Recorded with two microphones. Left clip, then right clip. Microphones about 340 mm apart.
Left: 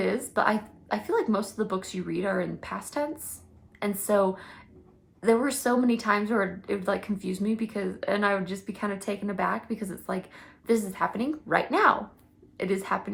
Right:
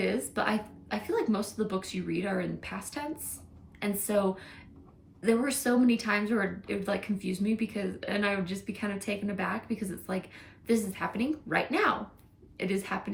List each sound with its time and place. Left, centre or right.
0.0 s a woman's voice: centre